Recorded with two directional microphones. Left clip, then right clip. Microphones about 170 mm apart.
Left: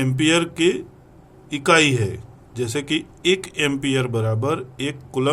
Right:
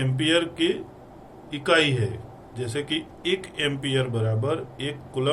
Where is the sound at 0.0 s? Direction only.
90° left.